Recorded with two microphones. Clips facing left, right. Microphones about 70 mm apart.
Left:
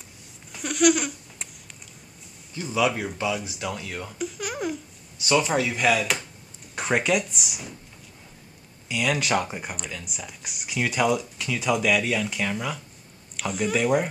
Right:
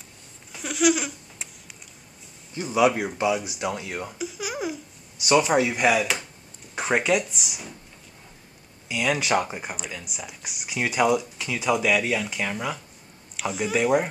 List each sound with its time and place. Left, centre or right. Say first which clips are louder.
0.5 s a sound: left 1 dB; centre
2.5 s speech: right 3 dB; right
4.2 s baby laughter: left 2 dB; centre
5.4 s speech: right 3 dB; centre
6.7 s speech: right 1 dB; centre
8.8 s speech: even; centre